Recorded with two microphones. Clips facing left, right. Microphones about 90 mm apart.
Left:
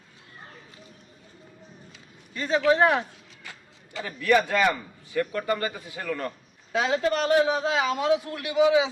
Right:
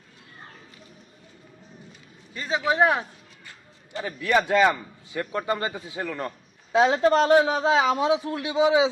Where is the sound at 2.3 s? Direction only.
15° right (ahead or behind).